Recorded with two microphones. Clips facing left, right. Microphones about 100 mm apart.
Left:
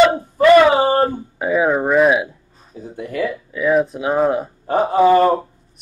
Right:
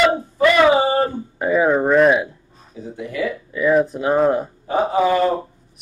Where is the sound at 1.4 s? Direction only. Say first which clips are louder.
Even; centre (ahead or behind).